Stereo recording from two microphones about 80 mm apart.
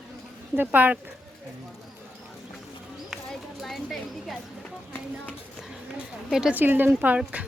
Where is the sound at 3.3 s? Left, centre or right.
Centre.